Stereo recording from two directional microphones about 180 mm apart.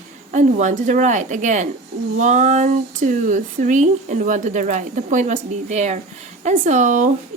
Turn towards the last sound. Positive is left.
turn(degrees=-45)  # may be behind; listen again after turning